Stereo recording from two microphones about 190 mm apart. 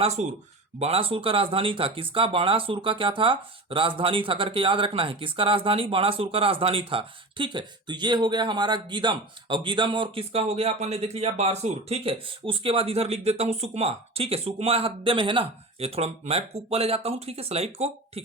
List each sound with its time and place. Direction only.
0.0 s speech: 35° right (ahead or behind)